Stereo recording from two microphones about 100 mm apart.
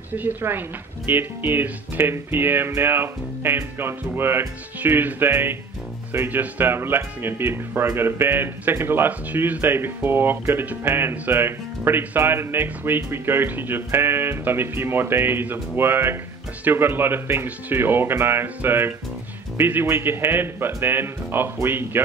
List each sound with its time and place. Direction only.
0.1 s speech: 20° right (ahead or behind)